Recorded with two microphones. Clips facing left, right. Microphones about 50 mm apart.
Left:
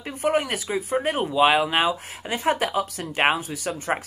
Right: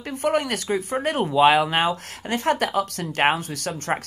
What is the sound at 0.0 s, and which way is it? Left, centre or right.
Speech, centre.